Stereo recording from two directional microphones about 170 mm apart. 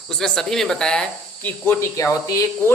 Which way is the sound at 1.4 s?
15° left (ahead or behind).